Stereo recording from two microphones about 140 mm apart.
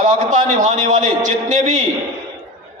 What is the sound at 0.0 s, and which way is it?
A man's voice, 65° right (ahead or behind).